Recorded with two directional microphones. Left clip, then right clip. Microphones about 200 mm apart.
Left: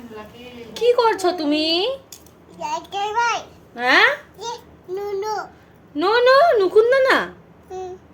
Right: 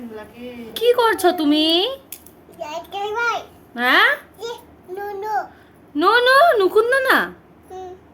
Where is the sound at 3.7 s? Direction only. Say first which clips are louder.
Even; 20° right (ahead or behind).